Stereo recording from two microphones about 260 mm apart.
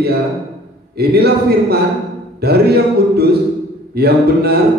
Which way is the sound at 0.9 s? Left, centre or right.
Right.